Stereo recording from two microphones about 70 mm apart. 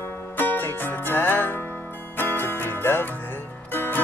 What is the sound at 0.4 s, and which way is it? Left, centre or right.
Music, left.